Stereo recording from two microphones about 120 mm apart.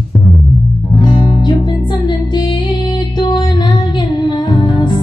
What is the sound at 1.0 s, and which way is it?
Music, 40° left (ahead or behind).